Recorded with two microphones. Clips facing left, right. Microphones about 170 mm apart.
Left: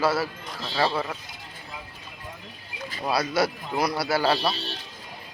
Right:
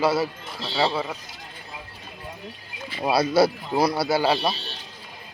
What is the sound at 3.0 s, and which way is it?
Speech, 30° right (ahead or behind).